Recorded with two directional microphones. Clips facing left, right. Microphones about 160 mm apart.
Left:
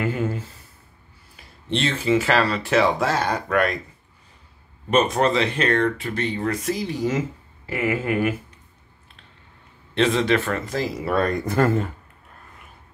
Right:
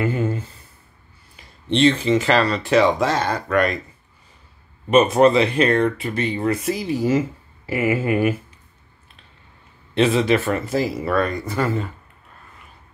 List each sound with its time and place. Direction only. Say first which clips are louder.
0.0 s a sound: right 2 dB; centre (ahead or behind)
1.3 s speech: right 4 dB; centre (ahead or behind)
4.9 s speech: right 5 dB; 10° right (ahead or behind)
9.9 s speech: right 2 dB; 10° right (ahead or behind)
11.4 s speech: left 3 dB; 50° left (ahead or behind)